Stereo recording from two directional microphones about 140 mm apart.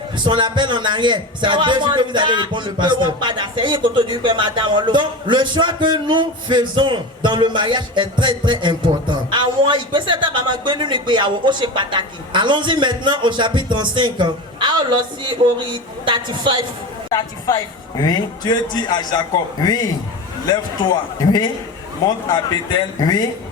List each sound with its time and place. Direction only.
0.3 s a man's voice: 35° right (ahead or behind)
17.1 s a woman's voice: 25° left (ahead or behind)
21.2 s a woman's voice: 30° left (ahead or behind)